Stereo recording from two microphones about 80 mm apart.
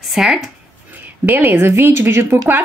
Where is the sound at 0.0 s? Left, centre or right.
Centre.